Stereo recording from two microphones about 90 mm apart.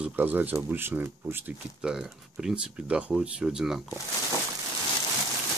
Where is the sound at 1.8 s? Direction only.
5° right (ahead or behind).